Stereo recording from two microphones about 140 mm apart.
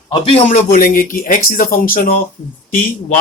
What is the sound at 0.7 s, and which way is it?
Speech, 85° left.